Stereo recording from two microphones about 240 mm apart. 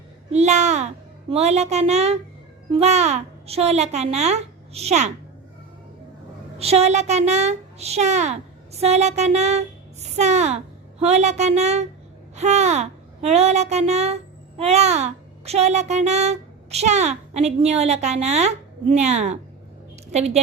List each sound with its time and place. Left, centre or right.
0.3 s a child's voice: right
6.6 s a child's voice: right